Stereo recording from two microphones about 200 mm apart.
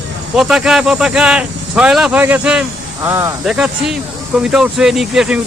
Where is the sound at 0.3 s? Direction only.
Centre (ahead or behind).